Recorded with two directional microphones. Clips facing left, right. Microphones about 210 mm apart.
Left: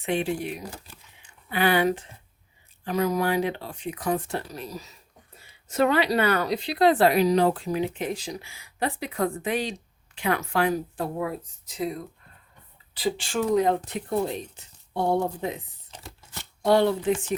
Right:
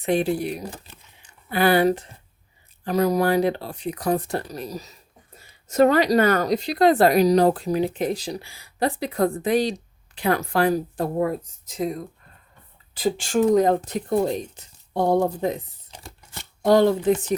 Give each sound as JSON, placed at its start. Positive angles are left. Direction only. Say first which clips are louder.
{"t": 0.0, "sound": "speech", "louder": "right 5 dB", "side_deg": -40}
{"t": 0.6, "sound": "speech", "louder": "right 4 dB", "side_deg": -20}
{"t": 1.2, "sound": "speech", "louder": "right 4 dB", "side_deg": -40}
{"t": 16.6, "sound": "speech", "louder": "right 4 dB", "side_deg": -40}